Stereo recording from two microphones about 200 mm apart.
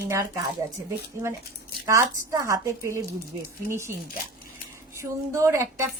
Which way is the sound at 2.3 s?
15° right (ahead or behind).